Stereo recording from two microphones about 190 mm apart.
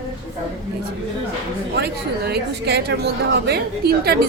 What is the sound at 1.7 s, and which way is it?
A woman's voice, 60° right (ahead or behind).